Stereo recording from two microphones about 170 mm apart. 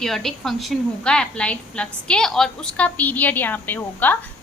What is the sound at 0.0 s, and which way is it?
A woman's voice, centre (ahead or behind).